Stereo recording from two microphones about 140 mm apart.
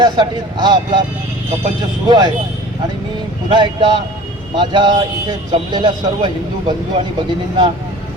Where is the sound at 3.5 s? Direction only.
35° right (ahead or behind).